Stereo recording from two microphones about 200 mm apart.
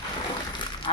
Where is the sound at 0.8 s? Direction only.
25° left (ahead or behind).